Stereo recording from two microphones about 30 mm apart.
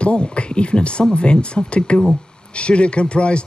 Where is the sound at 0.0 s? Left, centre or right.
Left.